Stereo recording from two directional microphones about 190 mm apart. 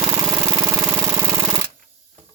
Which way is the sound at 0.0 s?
15° right (ahead or behind).